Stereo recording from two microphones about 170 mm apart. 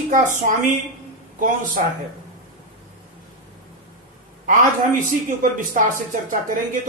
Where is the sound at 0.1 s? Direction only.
50° right (ahead or behind).